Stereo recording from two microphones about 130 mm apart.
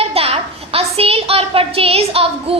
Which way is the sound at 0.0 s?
50° right (ahead or behind).